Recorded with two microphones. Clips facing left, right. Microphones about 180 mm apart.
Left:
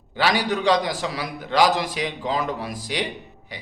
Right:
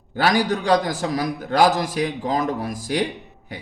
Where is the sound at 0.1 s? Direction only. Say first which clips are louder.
Right 2 dB; 45° right (ahead or behind).